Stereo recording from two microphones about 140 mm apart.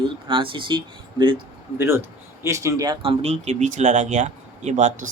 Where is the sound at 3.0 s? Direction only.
45° right (ahead or behind).